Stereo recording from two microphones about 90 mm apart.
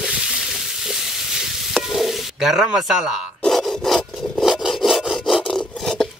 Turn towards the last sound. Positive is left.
turn(degrees=5)  # may be behind; listen again after turning